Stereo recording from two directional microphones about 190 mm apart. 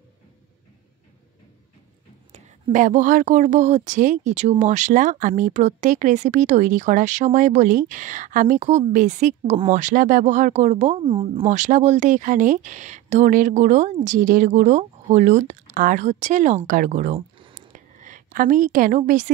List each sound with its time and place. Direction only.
2.3 s speech: 40° right (ahead or behind)
11.1 s speech: 25° right (ahead or behind)
11.4 s speech: 40° right (ahead or behind)
17.6 s a sound: 40° right (ahead or behind)